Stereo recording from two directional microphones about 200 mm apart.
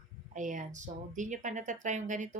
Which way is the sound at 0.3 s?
40° right (ahead or behind).